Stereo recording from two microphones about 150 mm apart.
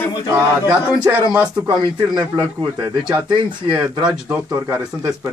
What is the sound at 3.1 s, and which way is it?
Speech, 30° right (ahead or behind).